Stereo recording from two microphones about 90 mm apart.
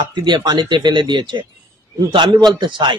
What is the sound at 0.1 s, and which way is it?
A man's voice, 55° right (ahead or behind).